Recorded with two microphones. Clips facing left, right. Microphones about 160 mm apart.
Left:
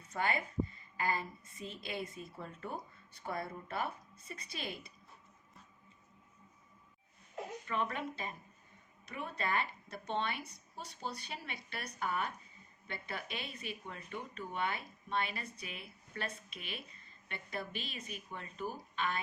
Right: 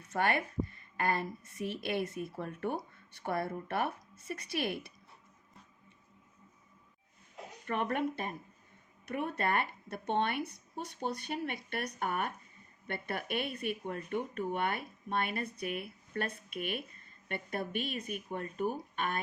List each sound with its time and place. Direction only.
0.1 s a woman's voice: 70° right (ahead or behind)
7.7 s speech: 60° right (ahead or behind)